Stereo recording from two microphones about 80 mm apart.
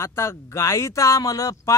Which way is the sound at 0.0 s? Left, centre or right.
Left.